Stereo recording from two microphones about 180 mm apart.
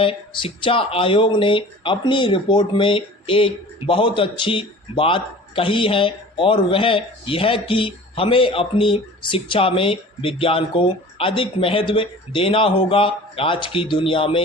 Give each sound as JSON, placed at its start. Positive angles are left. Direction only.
{"t": 0.0, "sound": "speech", "side_deg": 30}